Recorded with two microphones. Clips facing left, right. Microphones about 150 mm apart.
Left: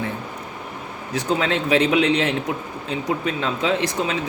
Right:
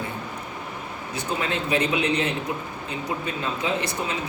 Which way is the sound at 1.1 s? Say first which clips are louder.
Left 6 dB; 90° left.